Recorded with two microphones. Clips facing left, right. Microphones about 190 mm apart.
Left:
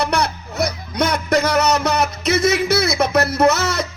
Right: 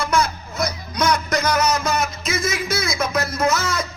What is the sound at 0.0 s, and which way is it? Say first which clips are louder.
Music: left 1 dB; 65° left (ahead or behind).